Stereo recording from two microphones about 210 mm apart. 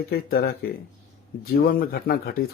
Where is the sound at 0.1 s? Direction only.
45° left (ahead or behind).